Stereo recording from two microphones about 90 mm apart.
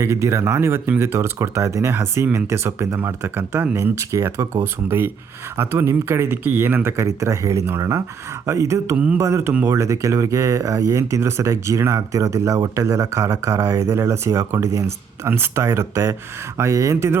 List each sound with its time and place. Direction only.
0.0 s speech: 30° right (ahead or behind)